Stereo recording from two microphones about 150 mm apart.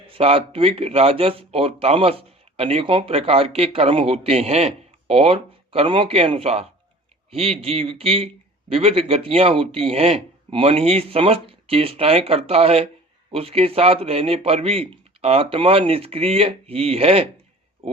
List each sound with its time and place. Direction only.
0.1 s speech: 40° right (ahead or behind)